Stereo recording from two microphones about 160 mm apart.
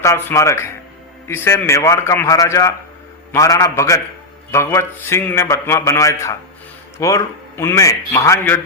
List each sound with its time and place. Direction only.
0.0 s a man's voice: 20° left (ahead or behind)